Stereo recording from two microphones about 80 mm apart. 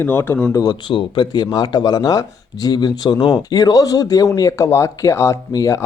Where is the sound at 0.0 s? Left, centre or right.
Left.